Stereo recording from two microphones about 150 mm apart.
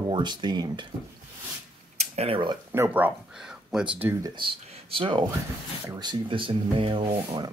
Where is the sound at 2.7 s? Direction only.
15° right (ahead or behind).